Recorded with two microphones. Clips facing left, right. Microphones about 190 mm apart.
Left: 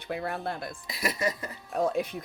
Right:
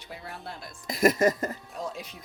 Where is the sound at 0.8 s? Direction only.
45° right (ahead or behind).